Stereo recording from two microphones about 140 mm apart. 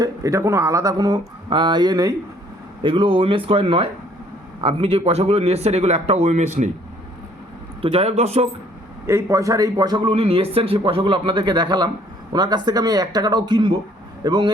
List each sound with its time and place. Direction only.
0.0 s speech: 25° right (ahead or behind)
2.8 s speech: 40° right (ahead or behind); by 6.7 s 60° right (ahead or behind)
7.8 s speech: 45° right (ahead or behind)
9.0 s speech: 20° right (ahead or behind)
10.1 s speech: 45° right (ahead or behind)